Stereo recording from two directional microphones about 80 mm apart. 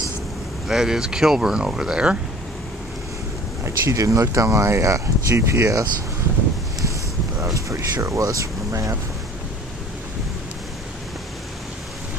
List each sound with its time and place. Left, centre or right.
0.7 s speech: centre
3.6 s speech: right
7.5 s speech: right